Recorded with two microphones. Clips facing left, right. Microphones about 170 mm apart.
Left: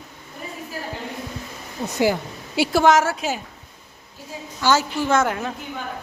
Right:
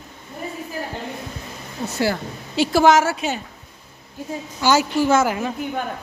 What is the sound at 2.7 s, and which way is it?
Speech, centre (ahead or behind).